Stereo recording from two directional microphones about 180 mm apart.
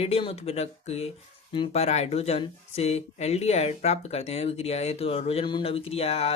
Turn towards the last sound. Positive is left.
turn(degrees=35)  # may be behind; listen again after turning